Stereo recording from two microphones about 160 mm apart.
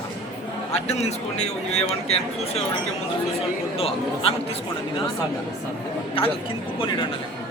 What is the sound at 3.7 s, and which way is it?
Speech, 35° left (ahead or behind).